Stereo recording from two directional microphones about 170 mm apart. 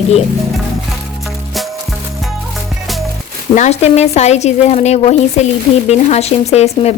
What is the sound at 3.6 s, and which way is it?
A woman's voice, 40° left (ahead or behind).